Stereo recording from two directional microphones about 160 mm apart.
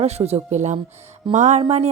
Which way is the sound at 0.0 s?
40° right (ahead or behind).